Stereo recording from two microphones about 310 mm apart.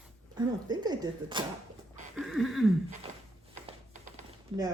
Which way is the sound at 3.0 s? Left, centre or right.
Centre.